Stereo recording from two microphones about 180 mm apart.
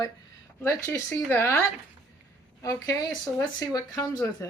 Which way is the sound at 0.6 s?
15° left (ahead or behind).